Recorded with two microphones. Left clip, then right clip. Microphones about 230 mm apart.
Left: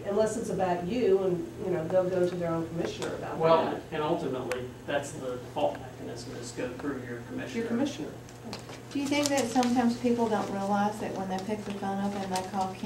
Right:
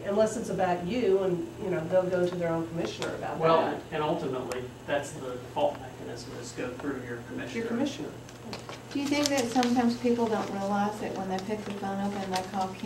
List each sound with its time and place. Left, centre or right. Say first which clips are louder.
0.1 s a woman's voice: right 1 dB; left
7.3 s a woman's voice: left 1 dB; left
8.9 s a woman's voice: even; left